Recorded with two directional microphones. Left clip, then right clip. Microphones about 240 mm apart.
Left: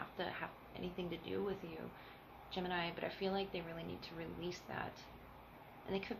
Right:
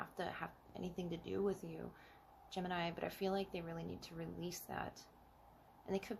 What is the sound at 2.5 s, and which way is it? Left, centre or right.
Speech, right.